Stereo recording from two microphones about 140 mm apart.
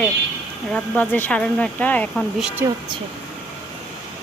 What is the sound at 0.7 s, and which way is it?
Speech, 15° left (ahead or behind).